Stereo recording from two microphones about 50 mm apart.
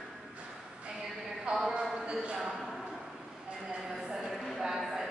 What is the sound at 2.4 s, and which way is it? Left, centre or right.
Speech, centre.